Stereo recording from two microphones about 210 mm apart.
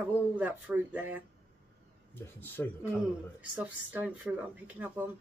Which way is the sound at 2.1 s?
10° left (ahead or behind).